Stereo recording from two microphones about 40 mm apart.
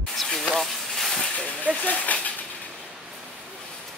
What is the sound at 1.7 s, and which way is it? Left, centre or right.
Speech, left.